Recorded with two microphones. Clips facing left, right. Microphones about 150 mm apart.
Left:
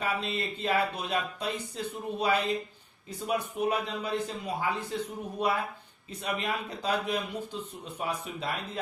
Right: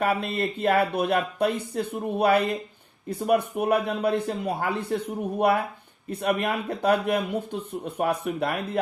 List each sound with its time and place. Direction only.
0.0 s speech: 55° right (ahead or behind)